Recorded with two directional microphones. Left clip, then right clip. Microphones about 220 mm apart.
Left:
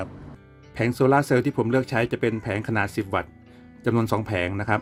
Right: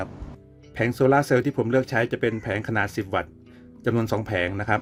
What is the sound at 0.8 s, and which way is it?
Speech, 10° left (ahead or behind).